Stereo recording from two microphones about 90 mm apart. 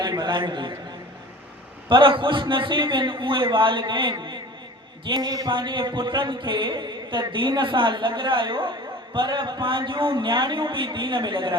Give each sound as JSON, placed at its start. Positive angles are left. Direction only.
{"t": 0.0, "sound": "a man's voice", "side_deg": -55}
{"t": 1.9, "sound": "a man's voice", "side_deg": -65}
{"t": 5.5, "sound": "speech", "side_deg": -60}